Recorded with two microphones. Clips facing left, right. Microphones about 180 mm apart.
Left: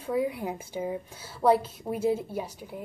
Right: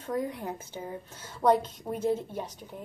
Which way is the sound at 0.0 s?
10° left (ahead or behind).